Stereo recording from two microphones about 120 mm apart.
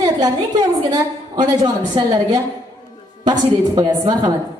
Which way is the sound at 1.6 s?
35° right (ahead or behind).